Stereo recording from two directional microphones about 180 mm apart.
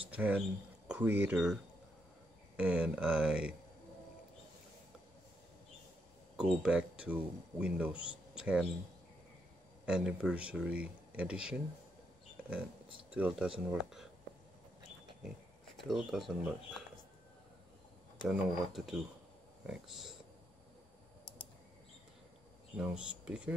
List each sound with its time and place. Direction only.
0.1 s speech: 10° right (ahead or behind)
6.3 s speech: 5° right (ahead or behind)
9.8 s speech: 5° right (ahead or behind)
13.1 s speech: 5° right (ahead or behind)
15.9 s speech: centre (ahead or behind)
18.3 s speech: centre (ahead or behind)
22.8 s speech: 5° right (ahead or behind)